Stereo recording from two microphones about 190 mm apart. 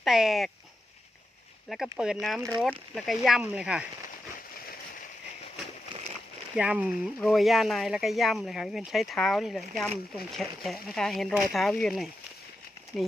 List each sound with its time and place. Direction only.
0.0 s speech: centre (ahead or behind)
1.7 s speech: 5° right (ahead or behind)
5.9 s a sound: 35° right (ahead or behind)
6.6 s speech: 5° right (ahead or behind)